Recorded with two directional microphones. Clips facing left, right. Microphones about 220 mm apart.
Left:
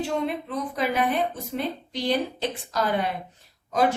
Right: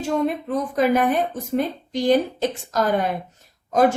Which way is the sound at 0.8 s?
45° right (ahead or behind).